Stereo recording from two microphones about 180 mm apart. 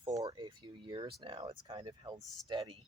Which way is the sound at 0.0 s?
20° right (ahead or behind).